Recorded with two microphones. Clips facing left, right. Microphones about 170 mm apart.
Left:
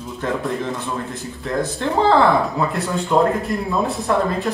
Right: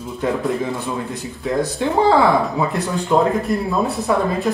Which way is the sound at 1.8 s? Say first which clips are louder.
Right 1 dB; 15° right (ahead or behind).